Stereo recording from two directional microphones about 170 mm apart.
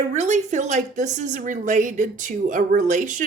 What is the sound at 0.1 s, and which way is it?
A woman's voice, 45° right (ahead or behind).